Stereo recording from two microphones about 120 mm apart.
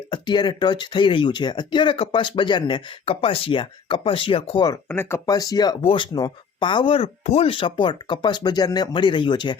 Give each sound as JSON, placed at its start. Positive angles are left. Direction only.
{"t": 0.1, "sound": "speech", "side_deg": 40}
{"t": 4.9, "sound": "speech", "side_deg": 20}
{"t": 5.2, "sound": "speech", "side_deg": 30}
{"t": 5.8, "sound": "speech", "side_deg": 45}